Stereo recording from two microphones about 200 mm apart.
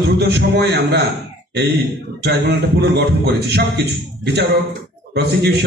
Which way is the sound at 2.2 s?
55° right (ahead or behind).